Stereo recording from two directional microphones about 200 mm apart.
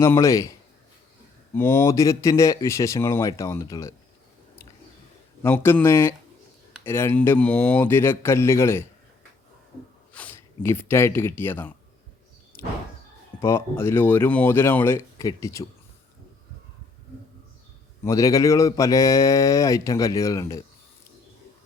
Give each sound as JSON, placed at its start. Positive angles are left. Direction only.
{"t": 0.0, "sound": "speech", "side_deg": 15}
{"t": 1.5, "sound": "speech", "side_deg": 10}
{"t": 5.4, "sound": "speech", "side_deg": 10}
{"t": 10.1, "sound": "speech", "side_deg": 10}
{"t": 13.4, "sound": "speech", "side_deg": 15}
{"t": 18.0, "sound": "speech", "side_deg": 15}